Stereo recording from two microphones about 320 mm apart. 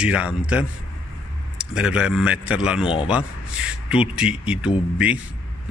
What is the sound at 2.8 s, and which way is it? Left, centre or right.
Speech, centre.